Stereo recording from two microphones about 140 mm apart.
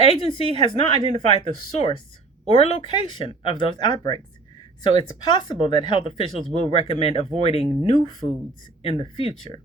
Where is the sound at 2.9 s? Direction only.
35° left (ahead or behind).